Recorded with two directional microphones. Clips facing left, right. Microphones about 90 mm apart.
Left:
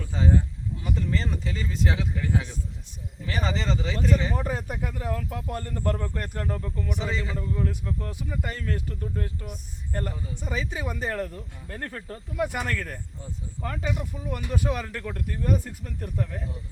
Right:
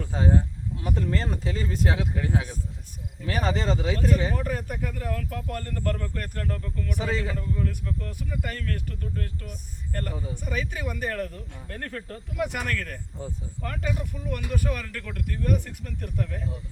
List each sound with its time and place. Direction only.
0.0 s speech: 40° right (ahead or behind)
4.4 s speech: 20° left (ahead or behind)
5.7 s a man's voice: 20° left (ahead or behind)
8.5 s speech: 15° left (ahead or behind)